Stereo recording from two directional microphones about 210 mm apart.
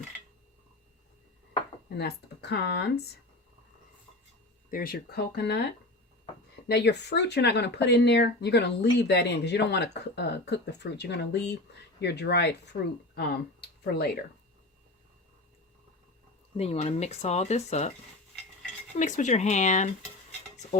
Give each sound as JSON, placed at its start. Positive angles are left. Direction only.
{"t": 2.0, "sound": "speech", "side_deg": 50}
{"t": 4.7, "sound": "speech", "side_deg": 45}
{"t": 6.7, "sound": "speech", "side_deg": 55}
{"t": 16.6, "sound": "speech", "side_deg": 30}
{"t": 18.9, "sound": "speech", "side_deg": 35}